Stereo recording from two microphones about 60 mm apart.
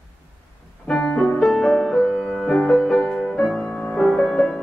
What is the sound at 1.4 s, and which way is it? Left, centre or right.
Music, centre.